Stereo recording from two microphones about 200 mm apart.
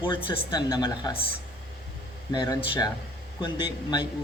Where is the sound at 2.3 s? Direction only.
20° left (ahead or behind).